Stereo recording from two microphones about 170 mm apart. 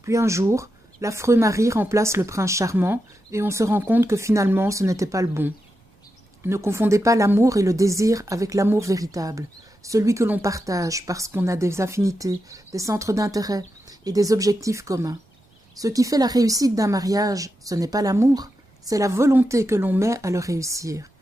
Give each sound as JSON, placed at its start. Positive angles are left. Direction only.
{"t": 0.0, "sound": "speech", "side_deg": -15}